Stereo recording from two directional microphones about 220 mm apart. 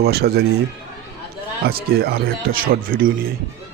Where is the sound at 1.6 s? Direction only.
45° right (ahead or behind).